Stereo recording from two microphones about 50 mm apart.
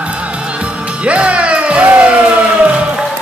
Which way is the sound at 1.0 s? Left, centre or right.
Right.